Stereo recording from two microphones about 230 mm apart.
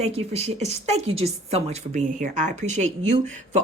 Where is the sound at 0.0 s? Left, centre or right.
Right.